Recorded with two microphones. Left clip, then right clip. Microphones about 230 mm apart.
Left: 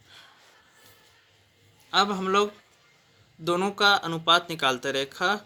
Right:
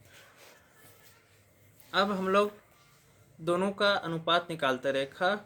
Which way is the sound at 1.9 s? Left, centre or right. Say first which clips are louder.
Left 4 dB; left.